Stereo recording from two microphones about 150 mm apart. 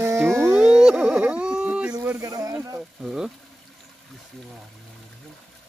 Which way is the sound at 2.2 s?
25° right (ahead or behind).